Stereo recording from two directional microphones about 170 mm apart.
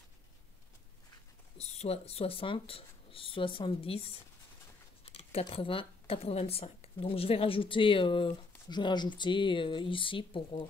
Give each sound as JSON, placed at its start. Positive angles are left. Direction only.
{"t": 1.6, "sound": "speech", "side_deg": 40}